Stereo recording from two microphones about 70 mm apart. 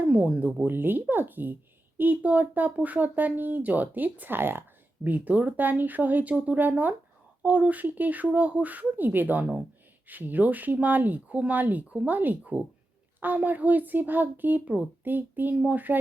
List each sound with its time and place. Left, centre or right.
0.0 s speech: centre